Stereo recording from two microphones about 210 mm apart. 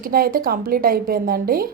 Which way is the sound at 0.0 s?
45° right (ahead or behind).